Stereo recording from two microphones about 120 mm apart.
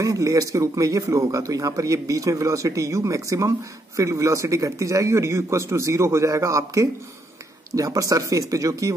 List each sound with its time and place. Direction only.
0.0 s speech: 25° right (ahead or behind)